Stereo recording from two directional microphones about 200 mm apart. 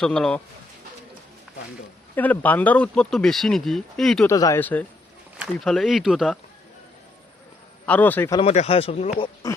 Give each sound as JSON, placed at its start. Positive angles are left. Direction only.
{"t": 0.0, "sound": "speech", "side_deg": 5}
{"t": 2.1, "sound": "speech", "side_deg": 10}
{"t": 4.3, "sound": "speech", "side_deg": 15}
{"t": 7.9, "sound": "speech", "side_deg": 10}
{"t": 8.4, "sound": "speech", "side_deg": 30}